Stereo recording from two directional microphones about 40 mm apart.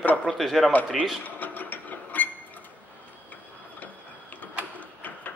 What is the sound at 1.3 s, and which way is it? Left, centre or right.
Mechanisms, left.